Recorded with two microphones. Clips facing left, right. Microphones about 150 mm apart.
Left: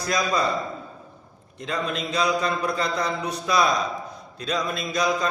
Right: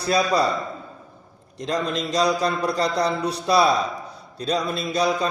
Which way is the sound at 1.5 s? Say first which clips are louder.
Right 3 dB; 40° right (ahead or behind).